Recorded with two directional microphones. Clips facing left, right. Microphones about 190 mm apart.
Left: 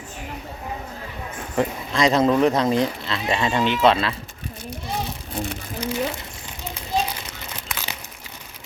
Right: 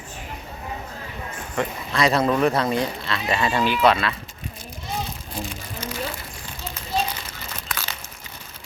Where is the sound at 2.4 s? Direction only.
20° left (ahead or behind).